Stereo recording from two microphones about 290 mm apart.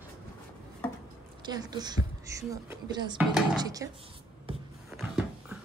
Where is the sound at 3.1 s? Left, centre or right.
Centre.